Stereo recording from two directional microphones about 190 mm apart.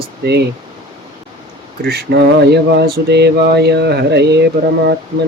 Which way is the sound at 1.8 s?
60° right (ahead or behind).